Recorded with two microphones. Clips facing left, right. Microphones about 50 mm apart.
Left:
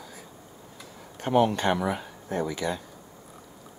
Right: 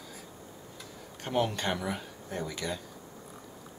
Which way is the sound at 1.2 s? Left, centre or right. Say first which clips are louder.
Left 7 dB; centre.